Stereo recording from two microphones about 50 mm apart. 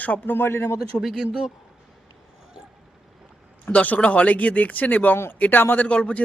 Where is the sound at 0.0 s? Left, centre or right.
Left.